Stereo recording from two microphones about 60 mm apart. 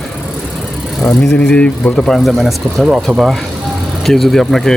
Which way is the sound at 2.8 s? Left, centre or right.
Centre.